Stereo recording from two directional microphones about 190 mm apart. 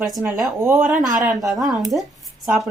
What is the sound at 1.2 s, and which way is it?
Speech, 20° right (ahead or behind).